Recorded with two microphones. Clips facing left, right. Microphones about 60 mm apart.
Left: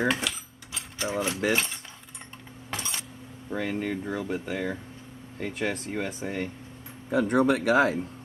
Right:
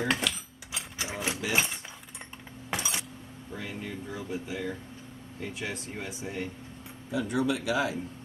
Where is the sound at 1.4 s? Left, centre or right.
Left.